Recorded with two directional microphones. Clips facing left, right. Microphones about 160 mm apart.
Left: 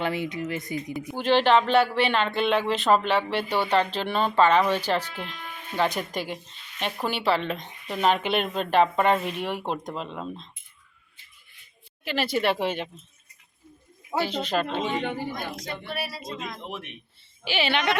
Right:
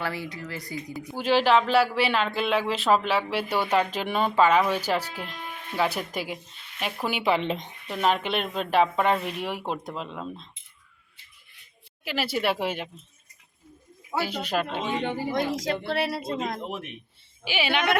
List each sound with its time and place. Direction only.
0.0 s speech: 20° left (ahead or behind)
1.1 s speech: 5° right (ahead or behind); by 7.7 s 20° right (ahead or behind)
7.9 s speech: centre (ahead or behind)
12.0 s speech: 5° right (ahead or behind)
14.2 s speech: 10° right (ahead or behind)
15.9 s speech: 70° right (ahead or behind); by 16.6 s 55° right (ahead or behind)
17.4 s speech: 10° right (ahead or behind)